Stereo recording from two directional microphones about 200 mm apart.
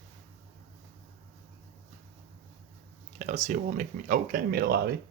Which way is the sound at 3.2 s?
35° right (ahead or behind).